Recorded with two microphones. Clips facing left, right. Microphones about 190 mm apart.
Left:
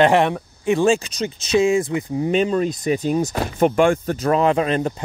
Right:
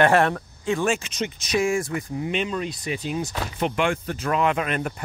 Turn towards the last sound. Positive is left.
turn(degrees=25)  # may be behind; listen again after turning